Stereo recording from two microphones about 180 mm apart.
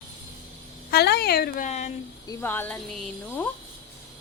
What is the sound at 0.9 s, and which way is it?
Speech, 65° left (ahead or behind).